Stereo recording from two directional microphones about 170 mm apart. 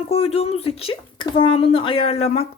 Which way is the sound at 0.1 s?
35° left (ahead or behind).